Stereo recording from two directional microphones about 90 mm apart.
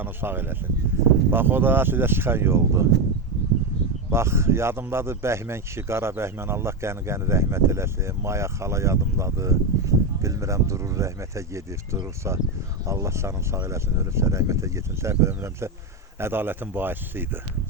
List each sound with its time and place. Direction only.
0.0 s speech: 25° right (ahead or behind)
4.1 s speech: 30° right (ahead or behind)